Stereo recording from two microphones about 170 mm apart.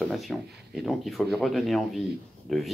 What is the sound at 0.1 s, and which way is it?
Speech, centre (ahead or behind).